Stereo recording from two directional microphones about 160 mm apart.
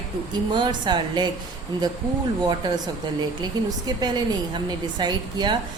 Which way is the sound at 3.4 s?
25° right (ahead or behind).